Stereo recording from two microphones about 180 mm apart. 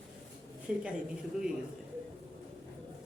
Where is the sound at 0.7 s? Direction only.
5° right (ahead or behind).